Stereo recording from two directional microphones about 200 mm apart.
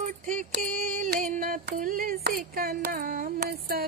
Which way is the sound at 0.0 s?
40° right (ahead or behind).